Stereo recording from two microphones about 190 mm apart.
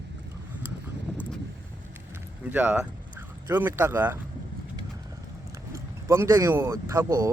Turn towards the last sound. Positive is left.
turn(degrees=-15)  # may be behind; listen again after turning